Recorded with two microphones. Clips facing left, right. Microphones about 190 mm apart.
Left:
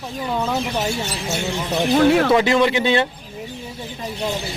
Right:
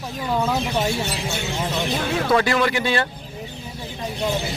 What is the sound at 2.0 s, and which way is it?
Speech, 65° left (ahead or behind).